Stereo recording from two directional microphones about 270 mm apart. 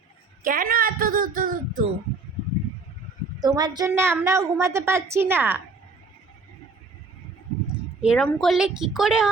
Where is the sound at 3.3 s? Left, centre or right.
Centre.